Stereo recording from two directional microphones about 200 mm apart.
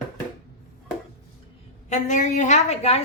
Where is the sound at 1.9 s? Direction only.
40° left (ahead or behind).